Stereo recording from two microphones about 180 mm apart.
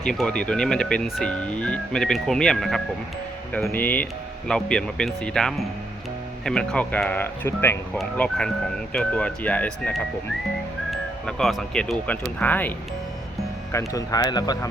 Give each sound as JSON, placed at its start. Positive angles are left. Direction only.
{"t": 0.1, "sound": "speech", "side_deg": 5}
{"t": 10.9, "sound": "speech", "side_deg": 0}
{"t": 13.7, "sound": "speech", "side_deg": 15}